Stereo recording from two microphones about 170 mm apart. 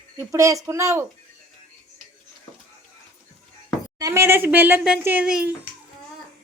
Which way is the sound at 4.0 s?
15° right (ahead or behind).